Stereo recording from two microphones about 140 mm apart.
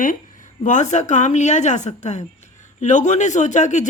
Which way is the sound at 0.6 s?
60° left (ahead or behind).